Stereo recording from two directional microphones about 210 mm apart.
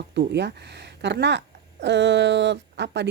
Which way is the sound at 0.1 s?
55° right (ahead or behind).